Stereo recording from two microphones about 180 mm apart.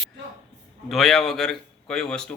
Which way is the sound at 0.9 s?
Centre (ahead or behind).